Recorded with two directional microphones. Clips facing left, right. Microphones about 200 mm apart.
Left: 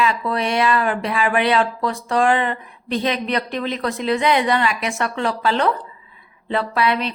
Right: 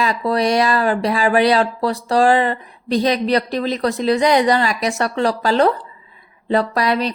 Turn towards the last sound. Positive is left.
turn(degrees=-40)  # may be behind; listen again after turning